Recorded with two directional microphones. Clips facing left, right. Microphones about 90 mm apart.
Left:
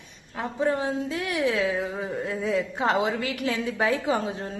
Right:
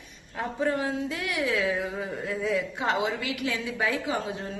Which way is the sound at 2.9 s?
40° left (ahead or behind).